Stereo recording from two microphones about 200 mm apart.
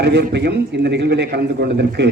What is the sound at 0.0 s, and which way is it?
A man's voice, 55° right (ahead or behind).